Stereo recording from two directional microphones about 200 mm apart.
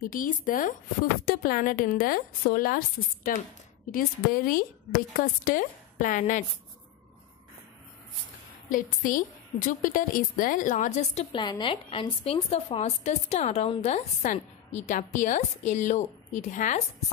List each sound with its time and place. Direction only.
0.0 s speech: 45° left (ahead or behind)
3.9 s a woman's voice: 45° left (ahead or behind)
8.6 s a woman's voice: 45° left (ahead or behind)